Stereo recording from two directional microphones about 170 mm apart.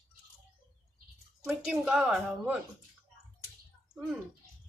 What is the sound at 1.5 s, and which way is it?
Speech, 5° right (ahead or behind).